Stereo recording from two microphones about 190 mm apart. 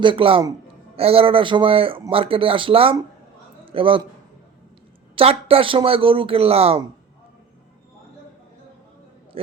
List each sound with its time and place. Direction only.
0.0 s a man's voice: 25° right (ahead or behind)
5.1 s a man's voice: 30° right (ahead or behind)
9.3 s a man's voice: 30° right (ahead or behind)